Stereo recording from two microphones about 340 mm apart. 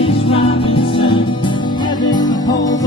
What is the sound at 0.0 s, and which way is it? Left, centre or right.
Music, centre.